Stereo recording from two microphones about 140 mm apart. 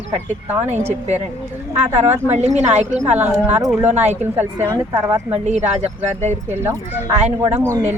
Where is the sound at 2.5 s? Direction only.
55° right (ahead or behind).